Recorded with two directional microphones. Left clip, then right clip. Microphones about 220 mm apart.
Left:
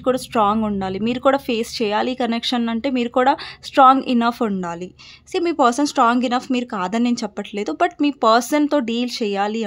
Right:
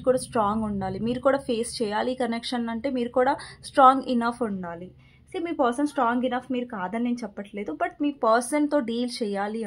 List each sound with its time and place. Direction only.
0.0 s speech: 30° left (ahead or behind)